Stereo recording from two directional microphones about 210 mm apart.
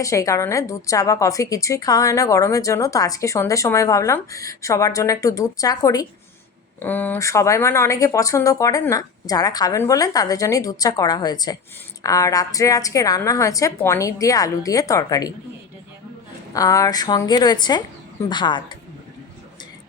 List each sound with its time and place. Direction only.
0.0 s a woman's voice: 15° left (ahead or behind)
16.5 s a woman's voice: 15° left (ahead or behind)